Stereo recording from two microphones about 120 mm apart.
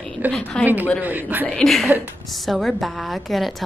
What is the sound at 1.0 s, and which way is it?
Speech, 15° right (ahead or behind).